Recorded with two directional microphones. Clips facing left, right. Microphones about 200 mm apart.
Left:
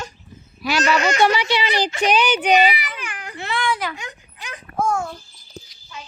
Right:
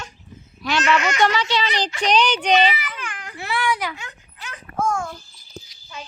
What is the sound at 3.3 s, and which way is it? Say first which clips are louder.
Baby cry: even; 10° right (ahead or behind).